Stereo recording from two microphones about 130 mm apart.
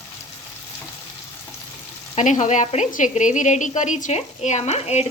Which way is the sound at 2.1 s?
65° left (ahead or behind).